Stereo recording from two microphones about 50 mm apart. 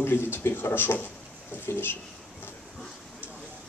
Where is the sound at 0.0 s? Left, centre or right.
Left.